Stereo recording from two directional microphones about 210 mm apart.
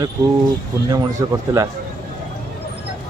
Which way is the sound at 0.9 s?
15° right (ahead or behind).